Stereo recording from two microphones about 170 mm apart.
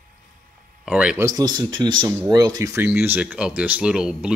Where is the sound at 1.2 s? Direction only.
25° right (ahead or behind).